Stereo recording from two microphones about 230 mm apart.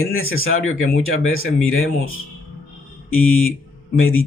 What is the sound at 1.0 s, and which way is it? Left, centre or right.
Speech, left.